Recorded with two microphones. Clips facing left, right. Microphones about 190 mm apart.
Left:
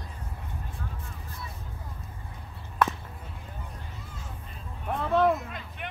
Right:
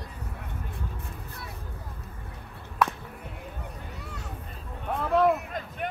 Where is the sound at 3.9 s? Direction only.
70° right (ahead or behind).